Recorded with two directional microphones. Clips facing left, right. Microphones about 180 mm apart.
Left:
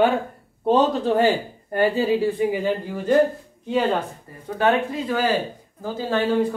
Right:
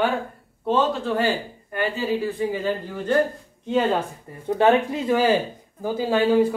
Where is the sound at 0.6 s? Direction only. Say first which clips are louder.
Left 3 dB; 35° left (ahead or behind).